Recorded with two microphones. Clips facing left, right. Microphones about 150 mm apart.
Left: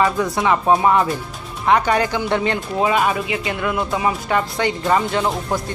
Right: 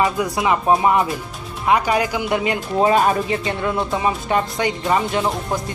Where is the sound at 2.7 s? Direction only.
40° right (ahead or behind); by 4.7 s 20° right (ahead or behind).